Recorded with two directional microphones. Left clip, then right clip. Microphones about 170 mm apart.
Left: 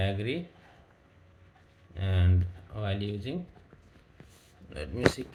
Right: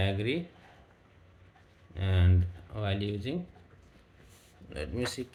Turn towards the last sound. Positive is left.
turn(degrees=-65)  # may be behind; listen again after turning